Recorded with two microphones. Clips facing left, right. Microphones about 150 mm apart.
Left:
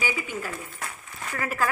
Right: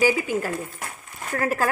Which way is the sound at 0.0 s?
40° right (ahead or behind).